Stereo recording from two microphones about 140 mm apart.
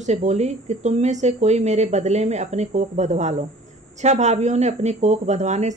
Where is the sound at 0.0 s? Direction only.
55° right (ahead or behind).